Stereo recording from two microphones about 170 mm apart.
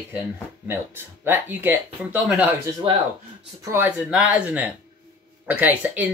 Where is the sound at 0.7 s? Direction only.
15° right (ahead or behind).